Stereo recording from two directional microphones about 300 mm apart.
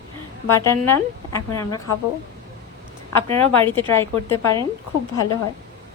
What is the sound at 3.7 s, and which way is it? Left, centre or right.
Speech, centre.